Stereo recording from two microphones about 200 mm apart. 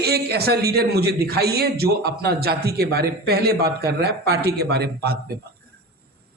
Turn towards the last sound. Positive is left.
turn(degrees=-50)  # may be behind; listen again after turning